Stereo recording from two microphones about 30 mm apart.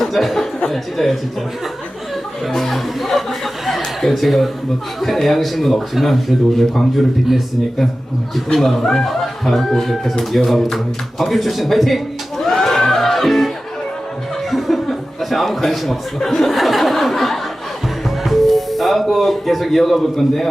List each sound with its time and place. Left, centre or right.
0.0 s a man's voice: centre
2.6 s chuckle: centre
4.9 s a man's voice: centre
8.5 s a man's voice: centre
12.4 s crowd: centre
15.2 s a man's voice: centre
16.1 s speech: centre
16.4 s a man's voice: centre
18.2 s music: centre